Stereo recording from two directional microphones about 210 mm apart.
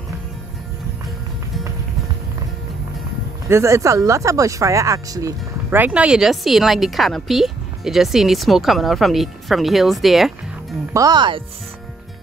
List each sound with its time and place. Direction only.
3.4 s speech: 15° right (ahead or behind)
10.9 s speech: 15° right (ahead or behind)